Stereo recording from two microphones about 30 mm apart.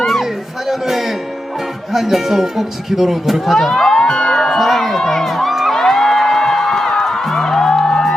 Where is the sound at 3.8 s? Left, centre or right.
Left.